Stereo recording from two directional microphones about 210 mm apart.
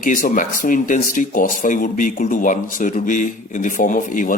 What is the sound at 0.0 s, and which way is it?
Speech, 40° left (ahead or behind).